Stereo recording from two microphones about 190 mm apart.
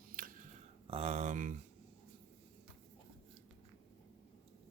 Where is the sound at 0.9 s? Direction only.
35° right (ahead or behind).